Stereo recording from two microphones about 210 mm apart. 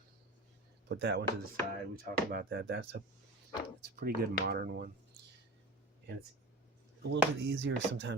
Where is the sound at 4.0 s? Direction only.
50° right (ahead or behind).